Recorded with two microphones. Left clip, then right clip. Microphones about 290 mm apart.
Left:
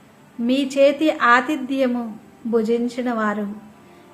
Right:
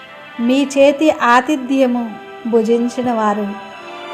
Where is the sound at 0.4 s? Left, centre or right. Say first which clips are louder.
Right 5 dB; centre.